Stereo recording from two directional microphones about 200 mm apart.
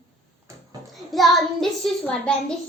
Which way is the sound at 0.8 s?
Centre (ahead or behind).